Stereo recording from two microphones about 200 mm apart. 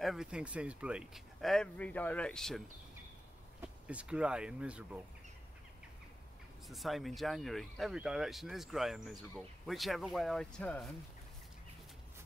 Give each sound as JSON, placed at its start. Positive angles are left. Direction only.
{"t": 0.0, "sound": "speech", "side_deg": 0}
{"t": 3.6, "sound": "speech", "side_deg": -5}
{"t": 6.7, "sound": "speech", "side_deg": 0}